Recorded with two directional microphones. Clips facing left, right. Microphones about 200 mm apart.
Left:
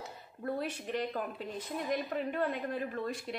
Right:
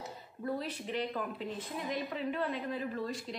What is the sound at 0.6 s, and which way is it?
A woman's voice, 50° left (ahead or behind).